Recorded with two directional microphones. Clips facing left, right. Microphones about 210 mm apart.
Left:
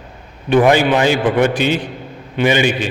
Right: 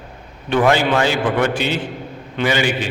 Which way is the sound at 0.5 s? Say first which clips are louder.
Left 4 dB; 15° left (ahead or behind).